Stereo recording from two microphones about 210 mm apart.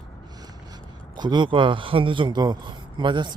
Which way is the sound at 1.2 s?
20° right (ahead or behind).